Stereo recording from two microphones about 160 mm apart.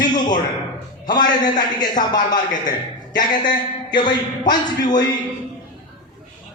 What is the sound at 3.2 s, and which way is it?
A man's voice, 30° left (ahead or behind).